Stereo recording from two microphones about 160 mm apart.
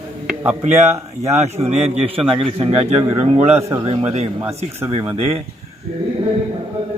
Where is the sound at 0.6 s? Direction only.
45° right (ahead or behind).